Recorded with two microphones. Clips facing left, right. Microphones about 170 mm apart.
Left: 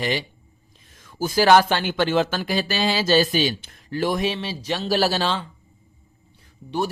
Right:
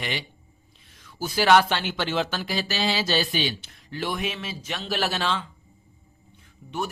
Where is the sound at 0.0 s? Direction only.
40° left (ahead or behind).